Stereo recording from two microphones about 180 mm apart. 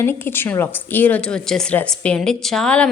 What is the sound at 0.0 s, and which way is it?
Speech, 15° left (ahead or behind).